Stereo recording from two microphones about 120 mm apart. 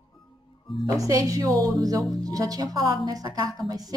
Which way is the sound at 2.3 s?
30° right (ahead or behind).